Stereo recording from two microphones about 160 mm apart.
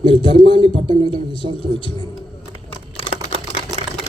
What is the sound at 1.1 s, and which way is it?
Speech, 35° left (ahead or behind).